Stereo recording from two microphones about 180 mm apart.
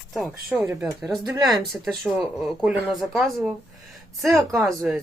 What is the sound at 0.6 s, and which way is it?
A woman's voice, 10° right (ahead or behind).